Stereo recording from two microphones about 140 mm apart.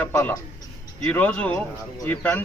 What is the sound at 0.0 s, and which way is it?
A man's voice, 15° left (ahead or behind).